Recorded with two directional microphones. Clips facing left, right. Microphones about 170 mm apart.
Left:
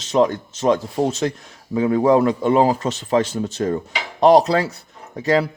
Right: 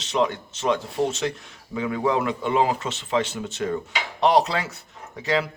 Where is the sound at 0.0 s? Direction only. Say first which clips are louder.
Left 6 dB; 40° left (ahead or behind).